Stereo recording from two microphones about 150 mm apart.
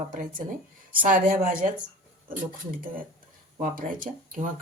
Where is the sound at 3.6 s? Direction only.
60° right (ahead or behind).